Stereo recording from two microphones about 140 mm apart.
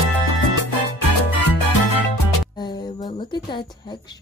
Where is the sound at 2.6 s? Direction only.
30° left (ahead or behind).